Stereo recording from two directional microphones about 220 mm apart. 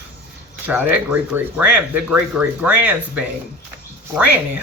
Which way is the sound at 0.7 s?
5° right (ahead or behind).